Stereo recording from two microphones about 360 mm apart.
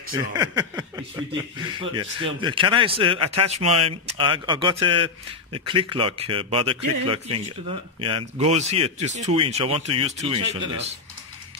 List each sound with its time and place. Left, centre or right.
0.4 s speech: centre